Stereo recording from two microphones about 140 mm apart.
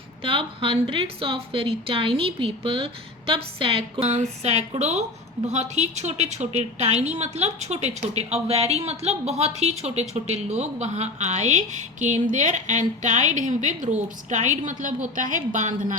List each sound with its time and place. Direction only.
0.2 s speech: 40° right (ahead or behind)
4.1 s a woman's voice: 55° right (ahead or behind)